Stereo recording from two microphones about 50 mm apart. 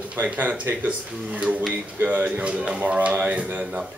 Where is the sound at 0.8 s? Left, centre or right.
Right.